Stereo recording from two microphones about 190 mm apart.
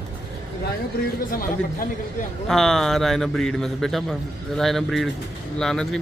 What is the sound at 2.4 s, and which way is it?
A man's voice, centre (ahead or behind).